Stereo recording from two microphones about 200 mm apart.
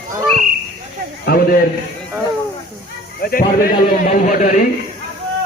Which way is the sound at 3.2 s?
45° left (ahead or behind).